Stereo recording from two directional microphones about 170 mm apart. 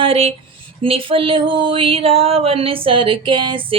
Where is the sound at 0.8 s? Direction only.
30° right (ahead or behind).